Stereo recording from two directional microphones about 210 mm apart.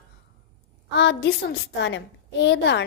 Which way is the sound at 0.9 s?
55° left (ahead or behind).